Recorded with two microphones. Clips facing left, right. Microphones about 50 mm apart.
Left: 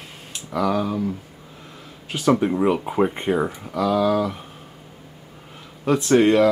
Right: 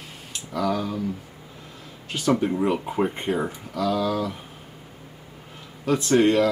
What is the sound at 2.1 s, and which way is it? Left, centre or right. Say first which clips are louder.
Speech: left 3 dB; centre.